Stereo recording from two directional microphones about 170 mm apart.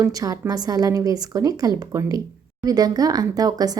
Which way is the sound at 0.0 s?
20° right (ahead or behind).